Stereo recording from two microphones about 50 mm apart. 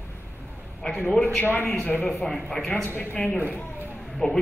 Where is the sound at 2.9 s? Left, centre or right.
Left.